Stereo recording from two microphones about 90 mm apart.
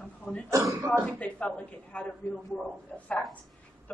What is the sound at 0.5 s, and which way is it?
Speech, 35° right (ahead or behind).